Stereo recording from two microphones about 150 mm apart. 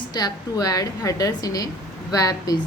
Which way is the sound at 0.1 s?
25° left (ahead or behind).